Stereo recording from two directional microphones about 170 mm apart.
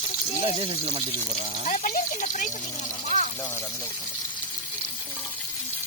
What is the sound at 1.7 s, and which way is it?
Speech, 50° left (ahead or behind).